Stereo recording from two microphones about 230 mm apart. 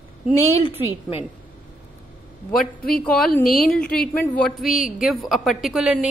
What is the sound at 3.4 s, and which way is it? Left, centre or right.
Speech, left.